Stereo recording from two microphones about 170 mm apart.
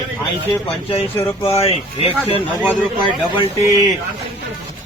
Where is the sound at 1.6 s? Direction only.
35° left (ahead or behind).